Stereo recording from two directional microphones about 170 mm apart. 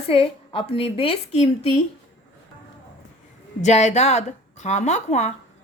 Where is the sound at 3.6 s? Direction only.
40° left (ahead or behind).